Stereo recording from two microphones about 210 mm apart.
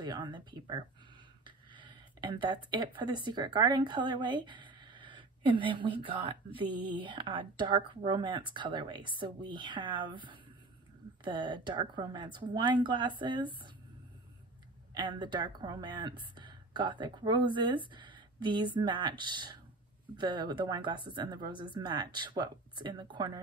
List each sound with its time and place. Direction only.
0.0 s speech: 20° right (ahead or behind)
15.0 s speech: 20° right (ahead or behind)